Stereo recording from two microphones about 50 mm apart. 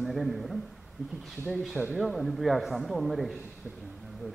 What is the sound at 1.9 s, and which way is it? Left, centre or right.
A man's voice, centre.